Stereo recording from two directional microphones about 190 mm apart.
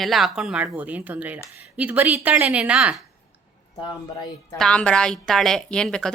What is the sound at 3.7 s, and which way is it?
Speech, 25° left (ahead or behind).